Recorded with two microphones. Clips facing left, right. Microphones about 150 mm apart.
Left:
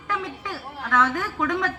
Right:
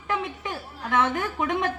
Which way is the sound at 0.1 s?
20° right (ahead or behind).